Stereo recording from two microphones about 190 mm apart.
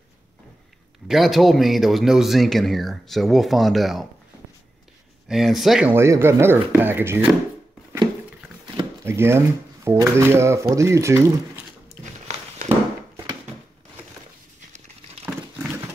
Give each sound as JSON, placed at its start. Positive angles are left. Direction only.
{"t": 1.0, "sound": "speech", "side_deg": 0}
{"t": 5.3, "sound": "speech", "side_deg": 0}
{"t": 8.7, "sound": "drawer open or close", "side_deg": -15}
{"t": 9.8, "sound": "speech", "side_deg": -15}
{"t": 12.0, "sound": "a sound", "side_deg": -40}